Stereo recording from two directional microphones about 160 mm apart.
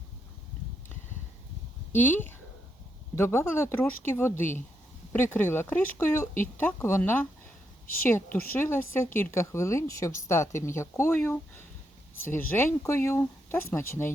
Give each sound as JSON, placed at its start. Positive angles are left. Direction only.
{"t": 1.9, "sound": "speech", "side_deg": 15}
{"t": 12.5, "sound": "speech", "side_deg": 15}